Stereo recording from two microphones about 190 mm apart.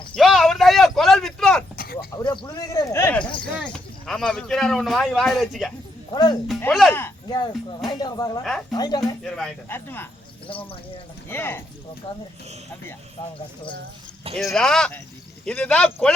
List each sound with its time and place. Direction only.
0.2 s a sound: centre (ahead or behind)
1.7 s a sound: 55° left (ahead or behind)
2.1 s a sound: 25° left (ahead or behind)
3.6 s speech: 5° left (ahead or behind)
6.9 s speech: 15° left (ahead or behind)
9.2 s speech: 5° left (ahead or behind)
10.5 s speech: 30° left (ahead or behind)
11.3 s speech: 10° left (ahead or behind)
14.3 s speech: centre (ahead or behind)